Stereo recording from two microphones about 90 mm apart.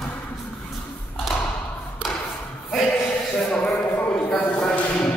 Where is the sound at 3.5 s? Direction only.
15° left (ahead or behind).